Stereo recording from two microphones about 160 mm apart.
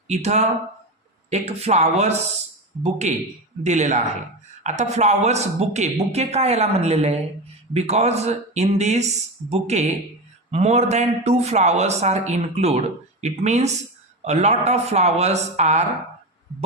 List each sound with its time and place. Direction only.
0.1 s speech: 45° right (ahead or behind)